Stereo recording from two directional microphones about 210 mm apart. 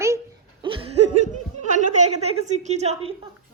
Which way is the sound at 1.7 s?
30° right (ahead or behind).